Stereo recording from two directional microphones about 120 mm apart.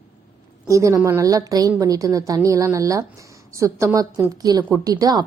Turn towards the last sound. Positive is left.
turn(degrees=-35)  # may be behind; listen again after turning